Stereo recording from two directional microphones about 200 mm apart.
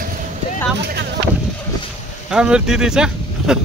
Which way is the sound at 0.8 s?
55° right (ahead or behind).